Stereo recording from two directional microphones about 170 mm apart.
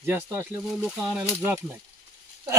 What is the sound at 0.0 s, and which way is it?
Speech, 10° right (ahead or behind).